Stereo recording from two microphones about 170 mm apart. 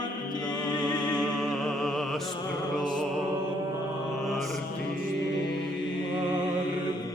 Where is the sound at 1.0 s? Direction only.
5° left (ahead or behind).